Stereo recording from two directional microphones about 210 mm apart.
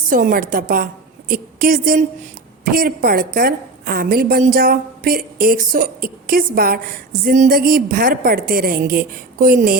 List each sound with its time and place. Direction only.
0.1 s a woman's voice: 40° right (ahead or behind)